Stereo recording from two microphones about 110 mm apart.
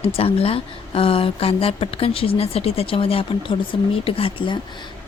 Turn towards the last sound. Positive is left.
turn(degrees=55)  # may be behind; listen again after turning